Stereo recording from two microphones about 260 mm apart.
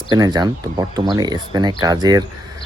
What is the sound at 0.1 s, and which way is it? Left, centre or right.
Speech, centre.